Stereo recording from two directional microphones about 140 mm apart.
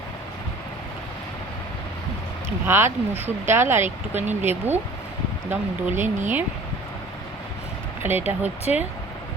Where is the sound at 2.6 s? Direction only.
15° right (ahead or behind).